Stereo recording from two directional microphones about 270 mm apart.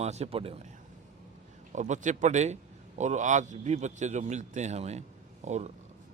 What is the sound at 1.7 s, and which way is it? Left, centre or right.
A man's voice, right.